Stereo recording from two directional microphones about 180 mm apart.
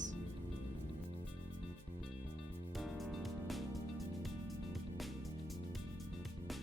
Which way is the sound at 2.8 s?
Centre (ahead or behind).